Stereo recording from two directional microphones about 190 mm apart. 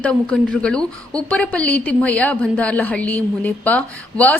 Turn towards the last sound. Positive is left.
turn(degrees=5)  # may be behind; listen again after turning